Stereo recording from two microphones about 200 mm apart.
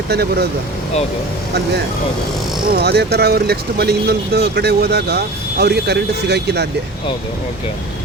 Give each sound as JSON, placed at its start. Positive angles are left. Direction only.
{"t": 0.1, "sound": "speech", "side_deg": -55}
{"t": 2.7, "sound": "speech", "side_deg": -55}